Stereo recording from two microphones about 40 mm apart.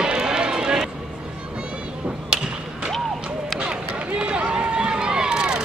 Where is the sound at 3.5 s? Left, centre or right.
Right.